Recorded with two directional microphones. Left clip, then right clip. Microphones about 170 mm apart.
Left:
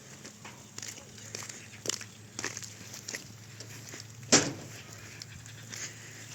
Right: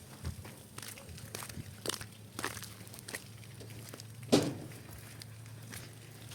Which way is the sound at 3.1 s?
10° left (ahead or behind).